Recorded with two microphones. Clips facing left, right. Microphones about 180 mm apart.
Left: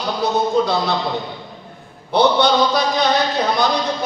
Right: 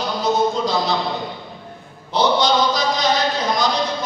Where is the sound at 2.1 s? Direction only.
60° left (ahead or behind).